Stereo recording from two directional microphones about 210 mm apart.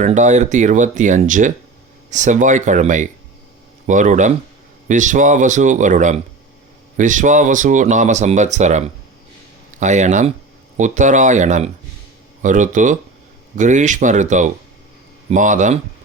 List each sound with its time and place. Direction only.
0.0 s speech: 35° right (ahead or behind)